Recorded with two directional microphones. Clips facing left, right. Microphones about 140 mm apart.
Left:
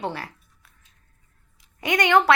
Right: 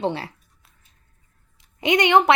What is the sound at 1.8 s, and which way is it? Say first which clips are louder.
Speech: right 2 dB; 20° right (ahead or behind).